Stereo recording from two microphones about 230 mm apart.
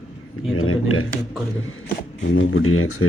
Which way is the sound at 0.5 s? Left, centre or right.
Left.